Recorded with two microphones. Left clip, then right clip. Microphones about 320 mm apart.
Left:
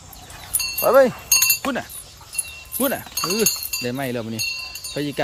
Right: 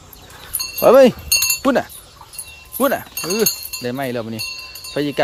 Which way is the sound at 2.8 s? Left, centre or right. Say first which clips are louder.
Right 5 dB; centre.